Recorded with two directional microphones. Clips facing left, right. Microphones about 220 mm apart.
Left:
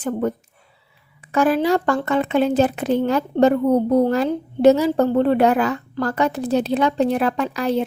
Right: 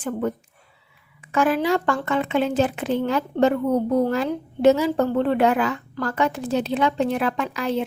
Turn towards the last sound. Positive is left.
turn(degrees=35)  # may be behind; listen again after turning